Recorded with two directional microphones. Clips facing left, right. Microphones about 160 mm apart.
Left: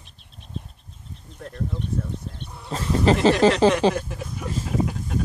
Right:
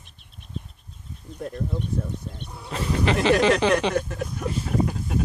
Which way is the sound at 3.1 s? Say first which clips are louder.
Left 5 dB; 35° left (ahead or behind).